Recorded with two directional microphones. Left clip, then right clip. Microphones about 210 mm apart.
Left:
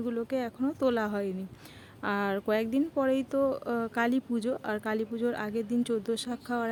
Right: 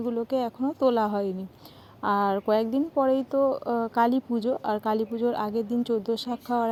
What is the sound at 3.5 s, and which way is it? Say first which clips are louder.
Speech: right 5 dB; 15° left (ahead or behind).